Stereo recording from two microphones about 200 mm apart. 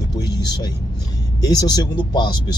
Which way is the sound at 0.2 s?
20° left (ahead or behind).